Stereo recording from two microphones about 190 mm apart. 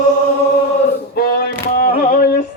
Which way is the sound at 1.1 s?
50° left (ahead or behind).